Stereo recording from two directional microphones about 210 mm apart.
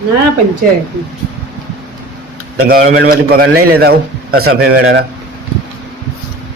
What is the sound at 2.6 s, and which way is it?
Speech, 45° right (ahead or behind).